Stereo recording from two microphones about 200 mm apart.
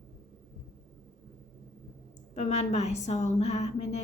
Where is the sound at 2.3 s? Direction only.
35° left (ahead or behind).